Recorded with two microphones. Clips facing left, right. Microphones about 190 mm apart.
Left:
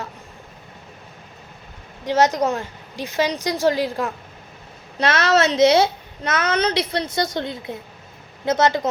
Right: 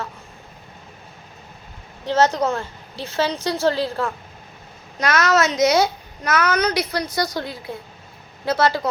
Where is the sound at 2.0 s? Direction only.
15° left (ahead or behind).